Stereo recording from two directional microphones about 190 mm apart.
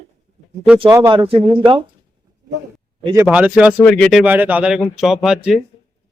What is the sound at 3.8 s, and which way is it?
Speech, 5° left (ahead or behind).